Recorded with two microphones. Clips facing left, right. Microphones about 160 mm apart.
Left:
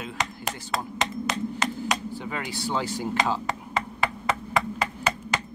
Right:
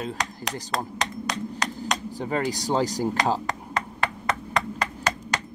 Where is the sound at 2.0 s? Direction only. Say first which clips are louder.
Right 6 dB; 40° right (ahead or behind).